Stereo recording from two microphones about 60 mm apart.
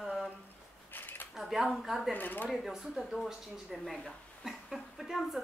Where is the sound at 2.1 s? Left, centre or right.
Left.